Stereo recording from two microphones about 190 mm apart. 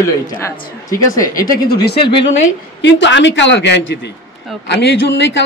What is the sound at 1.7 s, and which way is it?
Speech, 55° left (ahead or behind).